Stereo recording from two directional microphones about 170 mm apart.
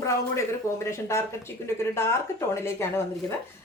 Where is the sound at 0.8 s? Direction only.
15° left (ahead or behind).